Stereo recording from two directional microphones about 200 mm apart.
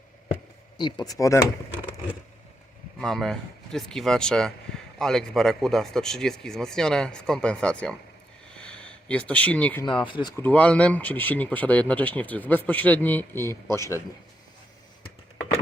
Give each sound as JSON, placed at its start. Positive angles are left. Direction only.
{"t": 0.8, "sound": "speech", "side_deg": 20}
{"t": 3.0, "sound": "a man's voice", "side_deg": 0}
{"t": 8.5, "sound": "a sound", "side_deg": 5}
{"t": 10.1, "sound": "speech", "side_deg": 20}
{"t": 10.4, "sound": "speech", "side_deg": 5}